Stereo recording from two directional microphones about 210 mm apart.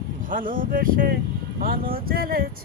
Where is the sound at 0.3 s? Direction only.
40° right (ahead or behind).